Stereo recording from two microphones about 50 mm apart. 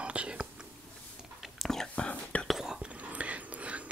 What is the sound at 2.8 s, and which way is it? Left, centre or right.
Whispering, right.